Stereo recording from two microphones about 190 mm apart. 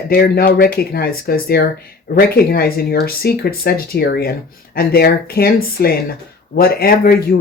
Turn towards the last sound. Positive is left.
turn(degrees=55)  # may be behind; listen again after turning